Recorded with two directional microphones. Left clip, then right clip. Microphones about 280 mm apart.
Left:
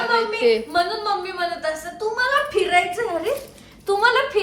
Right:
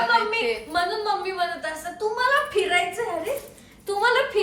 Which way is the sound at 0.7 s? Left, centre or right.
Centre.